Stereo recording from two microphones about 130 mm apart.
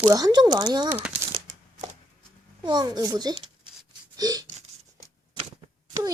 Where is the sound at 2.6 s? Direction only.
35° right (ahead or behind).